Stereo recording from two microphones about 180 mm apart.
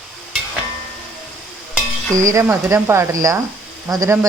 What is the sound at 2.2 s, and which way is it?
A woman's voice, 15° right (ahead or behind).